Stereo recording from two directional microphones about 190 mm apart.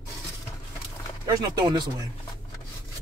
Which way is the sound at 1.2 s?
20° right (ahead or behind).